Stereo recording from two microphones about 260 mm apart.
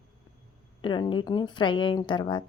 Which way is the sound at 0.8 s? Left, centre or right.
Centre.